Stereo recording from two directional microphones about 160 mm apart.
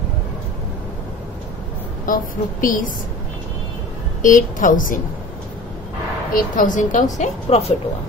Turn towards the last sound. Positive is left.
turn(degrees=45)  # may be behind; listen again after turning